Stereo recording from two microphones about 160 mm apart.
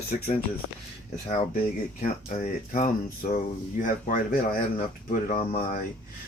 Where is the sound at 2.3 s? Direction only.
45° left (ahead or behind).